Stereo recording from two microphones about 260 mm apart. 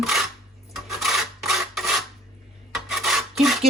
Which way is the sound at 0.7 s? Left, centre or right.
Centre.